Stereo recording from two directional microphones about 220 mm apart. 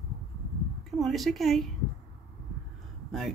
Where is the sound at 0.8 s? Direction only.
Centre (ahead or behind).